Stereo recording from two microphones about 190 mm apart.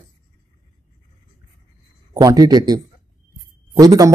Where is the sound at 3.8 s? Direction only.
20° right (ahead or behind).